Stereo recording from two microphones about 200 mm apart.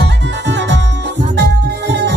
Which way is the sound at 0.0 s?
60° right (ahead or behind).